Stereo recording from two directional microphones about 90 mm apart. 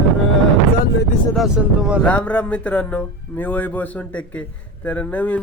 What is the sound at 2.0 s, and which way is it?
Speech, 15° left (ahead or behind).